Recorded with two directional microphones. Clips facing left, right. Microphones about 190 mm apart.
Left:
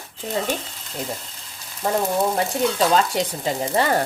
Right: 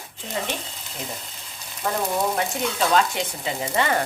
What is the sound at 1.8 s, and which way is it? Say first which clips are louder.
Frying: left 3 dB; 30° left (ahead or behind).